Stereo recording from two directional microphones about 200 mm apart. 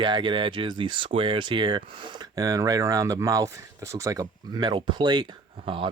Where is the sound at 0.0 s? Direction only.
25° right (ahead or behind).